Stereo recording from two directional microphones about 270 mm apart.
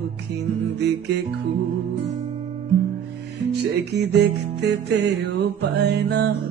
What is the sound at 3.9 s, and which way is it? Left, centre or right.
Music, right.